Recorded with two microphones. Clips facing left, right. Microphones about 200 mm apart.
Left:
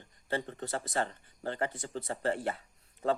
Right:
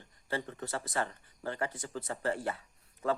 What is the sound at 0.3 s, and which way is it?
Speech, 30° left (ahead or behind).